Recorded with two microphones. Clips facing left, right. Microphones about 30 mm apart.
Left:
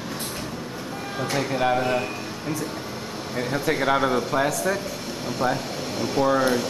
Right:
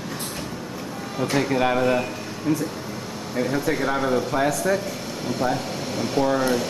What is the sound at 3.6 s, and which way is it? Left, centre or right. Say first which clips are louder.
Speech: left 1 dB; left.